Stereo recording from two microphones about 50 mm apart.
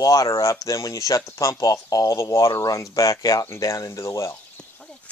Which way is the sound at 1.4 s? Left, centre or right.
Left.